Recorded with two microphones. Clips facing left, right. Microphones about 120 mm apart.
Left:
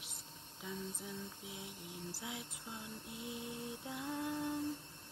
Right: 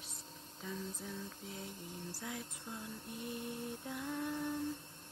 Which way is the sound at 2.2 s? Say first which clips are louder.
Right 3 dB; 15° left (ahead or behind).